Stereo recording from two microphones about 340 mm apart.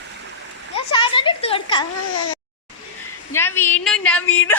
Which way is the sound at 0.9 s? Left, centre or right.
Centre.